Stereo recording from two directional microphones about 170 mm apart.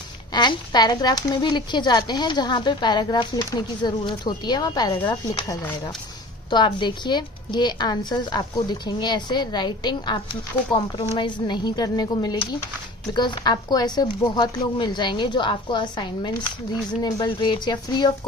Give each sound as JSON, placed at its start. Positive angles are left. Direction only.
{"t": 0.3, "sound": "speech", "side_deg": 25}